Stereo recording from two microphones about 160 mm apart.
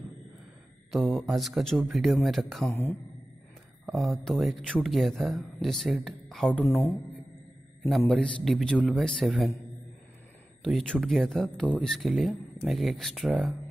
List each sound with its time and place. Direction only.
0.9 s speech: centre (ahead or behind)
2.7 s speech: 15° left (ahead or behind)
3.8 s a woman's voice: centre (ahead or behind)
8.1 s speech: 5° left (ahead or behind)
10.6 s speech: centre (ahead or behind)